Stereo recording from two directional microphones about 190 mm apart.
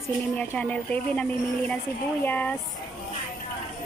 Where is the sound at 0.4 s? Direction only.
5° left (ahead or behind).